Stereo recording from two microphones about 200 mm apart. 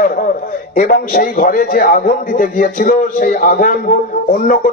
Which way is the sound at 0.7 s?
45° left (ahead or behind).